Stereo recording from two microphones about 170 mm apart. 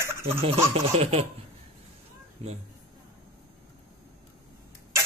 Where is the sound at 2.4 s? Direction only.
35° right (ahead or behind).